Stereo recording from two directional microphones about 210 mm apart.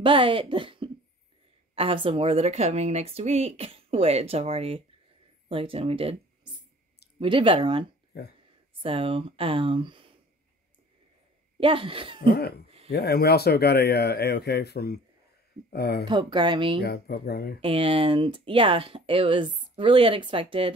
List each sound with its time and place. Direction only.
0.0 s speech: 25° right (ahead or behind)
7.2 s speech: 25° right (ahead or behind)
8.1 s speech: 50° left (ahead or behind)
8.8 s speech: 25° right (ahead or behind)
11.6 s speech: 25° right (ahead or behind)
12.3 s speech: 50° left (ahead or behind)
16.1 s speech: 20° right (ahead or behind)
16.8 s speech: 50° left (ahead or behind)
17.6 s speech: 25° right (ahead or behind)